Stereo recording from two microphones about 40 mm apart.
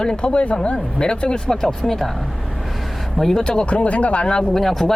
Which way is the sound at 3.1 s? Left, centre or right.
Centre.